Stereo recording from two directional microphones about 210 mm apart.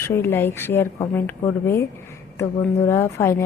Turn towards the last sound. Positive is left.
turn(degrees=10)  # may be behind; listen again after turning